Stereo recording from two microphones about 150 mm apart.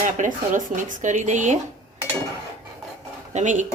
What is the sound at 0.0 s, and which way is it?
A woman's voice, 60° right (ahead or behind).